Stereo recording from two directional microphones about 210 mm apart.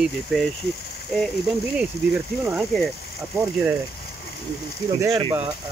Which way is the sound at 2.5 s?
Centre (ahead or behind).